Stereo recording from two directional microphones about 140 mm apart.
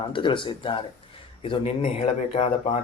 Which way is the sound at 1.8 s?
50° left (ahead or behind).